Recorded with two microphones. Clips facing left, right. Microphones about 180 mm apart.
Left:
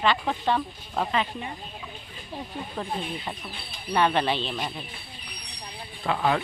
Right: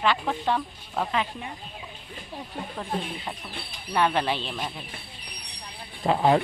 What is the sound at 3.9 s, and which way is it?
Speech, 5° right (ahead or behind).